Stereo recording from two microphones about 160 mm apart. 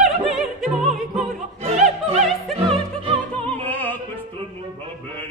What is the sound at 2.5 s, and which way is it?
Opera, 35° right (ahead or behind).